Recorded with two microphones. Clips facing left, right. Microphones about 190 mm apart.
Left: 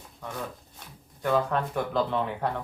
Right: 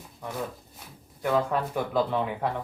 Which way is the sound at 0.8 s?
5° right (ahead or behind).